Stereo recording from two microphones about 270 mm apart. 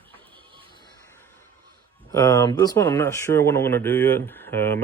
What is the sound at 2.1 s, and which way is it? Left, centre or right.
Speech, centre.